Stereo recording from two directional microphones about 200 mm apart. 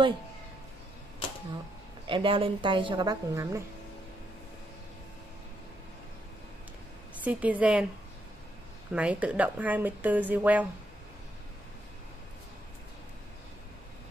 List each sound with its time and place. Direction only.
2.0 s a woman's voice: 25° right (ahead or behind)
7.2 s speech: 5° right (ahead or behind)
8.9 s speech: 5° right (ahead or behind)